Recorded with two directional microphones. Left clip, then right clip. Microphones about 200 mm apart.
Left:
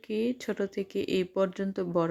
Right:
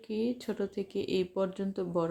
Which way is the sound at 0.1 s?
30° left (ahead or behind).